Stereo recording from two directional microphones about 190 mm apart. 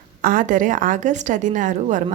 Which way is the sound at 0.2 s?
45° right (ahead or behind).